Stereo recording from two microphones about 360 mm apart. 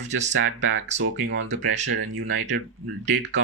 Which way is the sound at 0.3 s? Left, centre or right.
Right.